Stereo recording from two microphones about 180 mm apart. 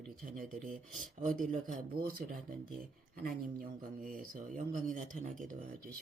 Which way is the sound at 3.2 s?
50° right (ahead or behind).